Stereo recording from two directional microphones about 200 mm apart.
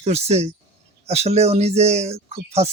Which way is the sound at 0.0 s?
30° right (ahead or behind).